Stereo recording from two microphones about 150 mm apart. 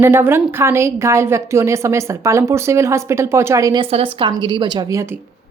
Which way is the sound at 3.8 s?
35° right (ahead or behind).